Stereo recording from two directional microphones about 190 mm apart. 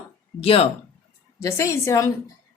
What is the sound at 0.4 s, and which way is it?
Speech, 30° left (ahead or behind).